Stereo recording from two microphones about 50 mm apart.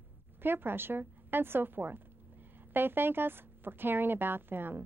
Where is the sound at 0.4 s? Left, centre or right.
Right.